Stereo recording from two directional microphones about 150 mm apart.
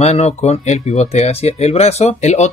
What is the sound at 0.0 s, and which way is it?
Speech, 45° left (ahead or behind).